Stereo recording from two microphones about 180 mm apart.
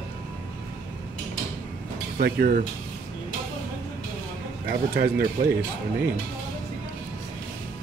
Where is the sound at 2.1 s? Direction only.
60° right (ahead or behind).